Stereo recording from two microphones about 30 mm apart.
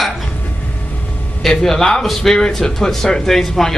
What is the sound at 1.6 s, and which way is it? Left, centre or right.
Speech, centre.